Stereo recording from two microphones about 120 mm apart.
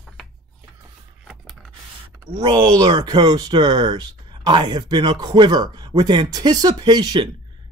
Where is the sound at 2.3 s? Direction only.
40° right (ahead or behind).